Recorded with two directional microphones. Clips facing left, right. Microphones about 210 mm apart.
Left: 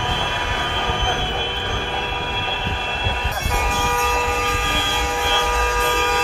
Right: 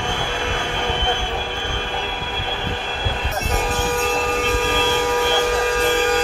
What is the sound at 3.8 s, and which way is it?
Train, 35° right (ahead or behind).